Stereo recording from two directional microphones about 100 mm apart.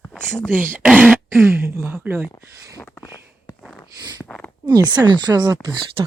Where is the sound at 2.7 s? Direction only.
35° left (ahead or behind).